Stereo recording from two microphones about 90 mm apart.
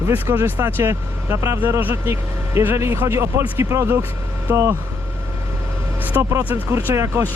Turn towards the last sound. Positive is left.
turn(degrees=-30)  # may be behind; listen again after turning